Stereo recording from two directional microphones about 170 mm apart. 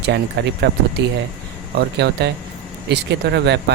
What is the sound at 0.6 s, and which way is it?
Speech, 75° right (ahead or behind).